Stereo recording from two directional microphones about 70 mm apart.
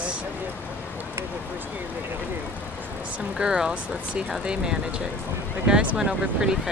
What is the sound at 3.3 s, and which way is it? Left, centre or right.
Speech, centre.